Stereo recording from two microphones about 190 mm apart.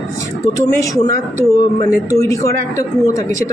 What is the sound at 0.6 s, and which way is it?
Speech, 20° left (ahead or behind).